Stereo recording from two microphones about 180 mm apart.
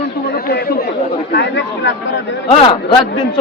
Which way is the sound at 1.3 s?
75° left (ahead or behind).